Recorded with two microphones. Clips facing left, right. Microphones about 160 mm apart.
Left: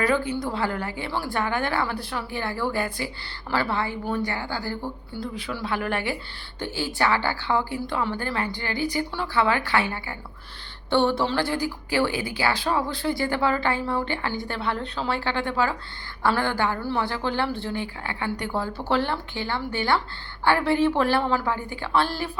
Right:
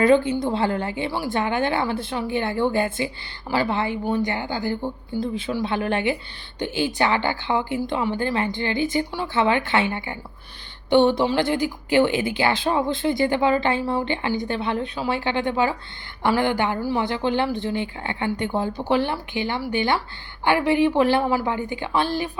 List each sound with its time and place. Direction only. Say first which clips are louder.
0.0 s a woman's voice: right 6 dB; 25° right (ahead or behind)